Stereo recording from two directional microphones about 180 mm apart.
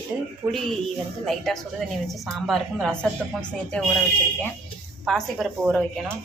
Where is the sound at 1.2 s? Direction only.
Centre (ahead or behind).